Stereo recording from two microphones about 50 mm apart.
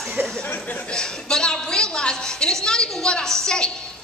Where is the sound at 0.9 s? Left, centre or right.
Centre.